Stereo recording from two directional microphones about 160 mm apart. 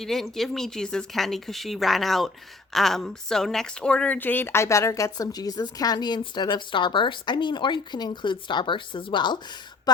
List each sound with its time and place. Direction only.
0.0 s speech: centre (ahead or behind); by 9.4 s 30° left (ahead or behind)